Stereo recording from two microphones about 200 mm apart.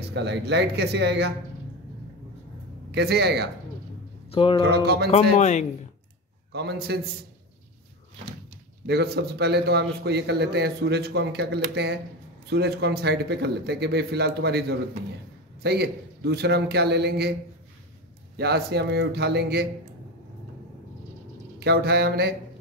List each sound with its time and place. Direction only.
0.1 s a man's voice: 60° right (ahead or behind)
2.9 s a man's voice: 55° right (ahead or behind)
4.3 s speech: 25° left (ahead or behind)
4.8 s speech: 55° right (ahead or behind)
5.1 s speech: 35° left (ahead or behind)
6.5 s a man's voice: 55° right (ahead or behind)
8.8 s a man's voice: 55° right (ahead or behind)
18.3 s speech: 55° right (ahead or behind)
21.5 s speech: 55° right (ahead or behind)